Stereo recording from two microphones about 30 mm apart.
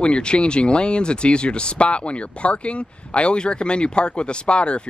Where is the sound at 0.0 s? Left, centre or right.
Left.